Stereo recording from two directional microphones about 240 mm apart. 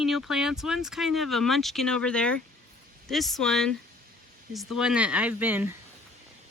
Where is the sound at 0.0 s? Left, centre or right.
Centre.